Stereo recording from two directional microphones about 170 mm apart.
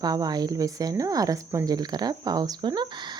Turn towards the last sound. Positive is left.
turn(degrees=-25)  # may be behind; listen again after turning